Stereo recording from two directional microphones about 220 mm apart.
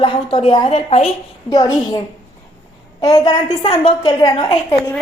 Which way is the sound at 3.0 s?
15° left (ahead or behind).